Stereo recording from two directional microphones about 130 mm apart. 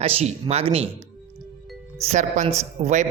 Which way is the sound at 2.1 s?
60° right (ahead or behind).